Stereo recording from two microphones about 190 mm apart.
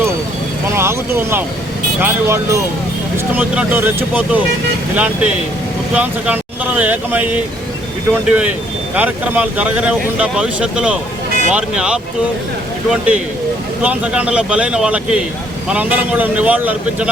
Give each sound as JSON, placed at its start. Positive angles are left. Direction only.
{"t": 0.7, "sound": "speech", "side_deg": -15}